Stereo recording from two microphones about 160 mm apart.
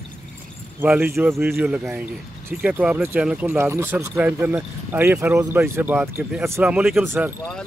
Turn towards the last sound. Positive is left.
turn(degrees=-10)  # may be behind; listen again after turning